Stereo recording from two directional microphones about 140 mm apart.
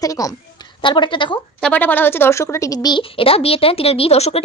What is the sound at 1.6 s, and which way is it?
A woman's voice, 10° left (ahead or behind).